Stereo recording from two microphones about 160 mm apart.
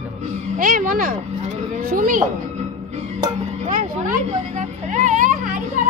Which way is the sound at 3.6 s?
50° right (ahead or behind).